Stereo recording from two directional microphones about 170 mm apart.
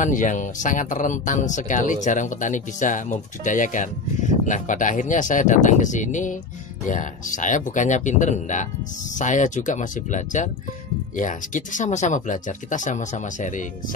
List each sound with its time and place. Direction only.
0.0 s speech: 50° left (ahead or behind)